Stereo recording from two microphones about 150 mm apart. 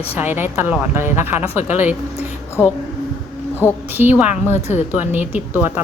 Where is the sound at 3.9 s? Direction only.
10° right (ahead or behind).